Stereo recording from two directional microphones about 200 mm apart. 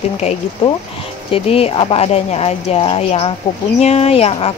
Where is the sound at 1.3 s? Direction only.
30° left (ahead or behind).